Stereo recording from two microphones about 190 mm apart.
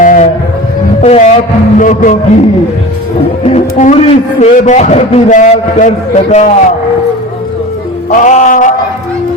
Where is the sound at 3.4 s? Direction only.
35° left (ahead or behind).